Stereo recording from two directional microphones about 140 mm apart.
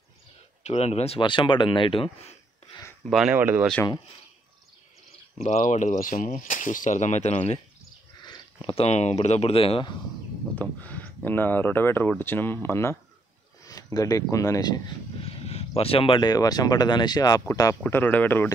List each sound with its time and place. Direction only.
0.7 s speech: 50° left (ahead or behind)
3.1 s speech: 5° right (ahead or behind)
3.3 s speech: 15° right (ahead or behind)
5.4 s speech: 60° left (ahead or behind)
8.2 s speech: 30° left (ahead or behind)
10.5 s speech: 10° left (ahead or behind)
15.2 s speech: 45° left (ahead or behind); by 18.5 s 15° left (ahead or behind)